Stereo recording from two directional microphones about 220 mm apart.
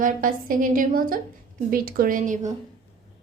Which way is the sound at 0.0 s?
40° right (ahead or behind).